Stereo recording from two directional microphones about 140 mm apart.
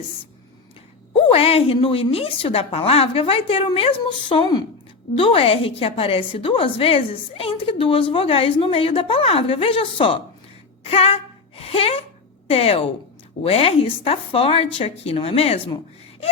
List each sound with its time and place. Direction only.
1.1 s a woman's voice: 45° left (ahead or behind)
10.8 s a sound: 45° left (ahead or behind)
12.5 s speech: 45° left (ahead or behind)